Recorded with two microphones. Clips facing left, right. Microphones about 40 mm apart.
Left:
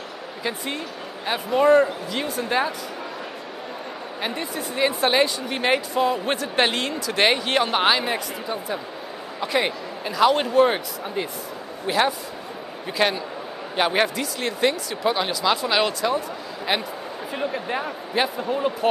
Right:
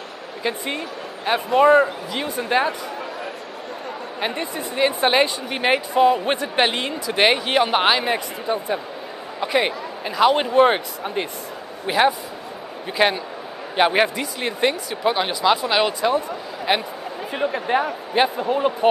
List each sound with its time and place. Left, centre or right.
0.4 s speech: centre
4.2 s speech: centre
10.6 s speech: right
11.8 s speech: centre